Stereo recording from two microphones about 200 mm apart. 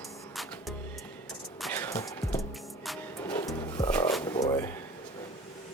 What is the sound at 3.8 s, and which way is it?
Roaring cats, 10° left (ahead or behind).